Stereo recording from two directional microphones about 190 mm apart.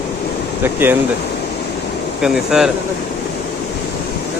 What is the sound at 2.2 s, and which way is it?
Speech, 5° right (ahead or behind).